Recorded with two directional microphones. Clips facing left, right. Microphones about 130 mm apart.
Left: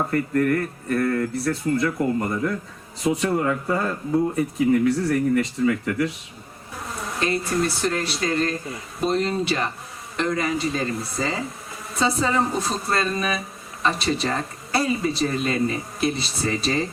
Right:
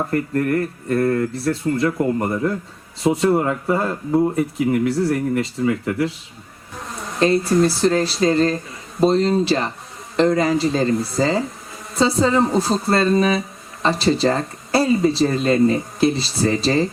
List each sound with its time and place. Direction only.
0.1 s speech: 35° right (ahead or behind)
4.9 s speech: 25° right (ahead or behind)
7.2 s speech: 30° right (ahead or behind)